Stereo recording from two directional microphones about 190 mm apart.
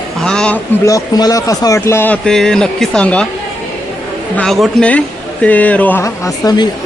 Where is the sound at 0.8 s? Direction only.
20° left (ahead or behind).